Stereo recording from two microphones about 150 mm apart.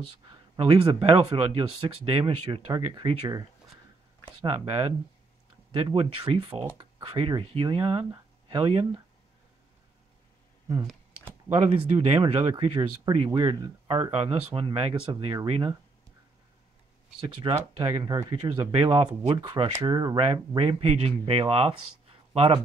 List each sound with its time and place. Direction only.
0.6 s speech: 40° right (ahead or behind)
11.5 s speech: 40° right (ahead or behind)
17.7 s speech: 30° right (ahead or behind)
20.2 s speech: 40° right (ahead or behind)